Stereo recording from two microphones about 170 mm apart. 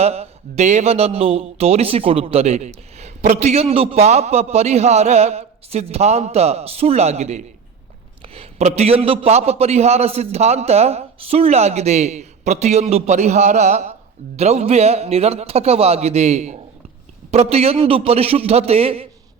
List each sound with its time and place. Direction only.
0.0 s a man's voice: 40° right (ahead or behind)